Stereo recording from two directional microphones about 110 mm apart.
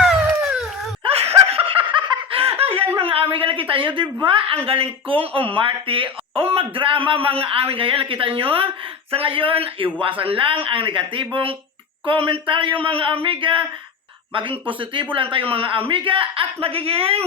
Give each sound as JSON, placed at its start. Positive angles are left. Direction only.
{"t": 0.0, "sound": "dog", "side_deg": -5}
{"t": 1.0, "sound": "laughter", "side_deg": -65}
{"t": 2.4, "sound": "laughter", "side_deg": -65}
{"t": 3.0, "sound": "a sound", "side_deg": -60}
{"t": 4.2, "sound": "speech", "side_deg": -55}